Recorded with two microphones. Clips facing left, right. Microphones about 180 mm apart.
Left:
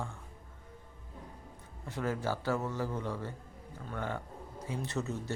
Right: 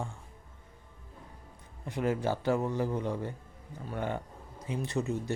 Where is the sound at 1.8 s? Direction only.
15° right (ahead or behind).